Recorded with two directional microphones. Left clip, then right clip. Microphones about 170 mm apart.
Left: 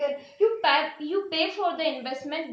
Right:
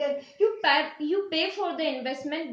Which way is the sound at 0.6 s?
15° left (ahead or behind).